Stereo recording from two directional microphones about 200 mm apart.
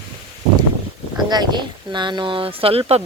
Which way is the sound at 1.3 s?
20° right (ahead or behind).